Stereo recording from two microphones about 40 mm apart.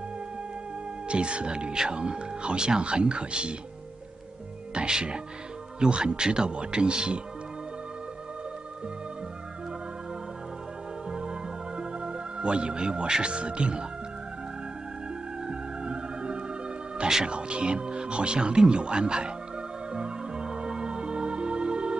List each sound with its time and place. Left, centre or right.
1.0 s speech: right
4.7 s speech: right
11.1 s music: right
15.4 s music: right
17.3 s speech: right
19.9 s music: centre